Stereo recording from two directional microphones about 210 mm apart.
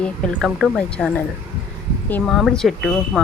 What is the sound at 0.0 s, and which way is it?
Speech, centre (ahead or behind).